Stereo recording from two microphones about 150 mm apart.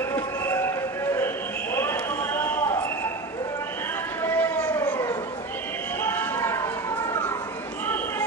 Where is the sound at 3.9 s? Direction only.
15° left (ahead or behind).